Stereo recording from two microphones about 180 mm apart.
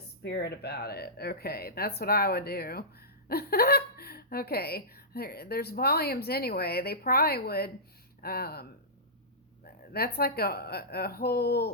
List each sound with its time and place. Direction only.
0.2 s a woman's voice: 65° left (ahead or behind)
9.6 s a woman's voice: 60° left (ahead or behind)